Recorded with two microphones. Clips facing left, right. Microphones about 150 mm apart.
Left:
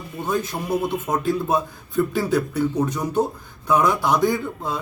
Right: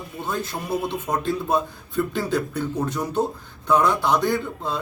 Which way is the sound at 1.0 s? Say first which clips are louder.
Left 2 dB; 10° left (ahead or behind).